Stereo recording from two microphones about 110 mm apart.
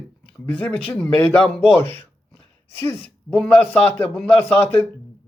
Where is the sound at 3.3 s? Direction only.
5° left (ahead or behind).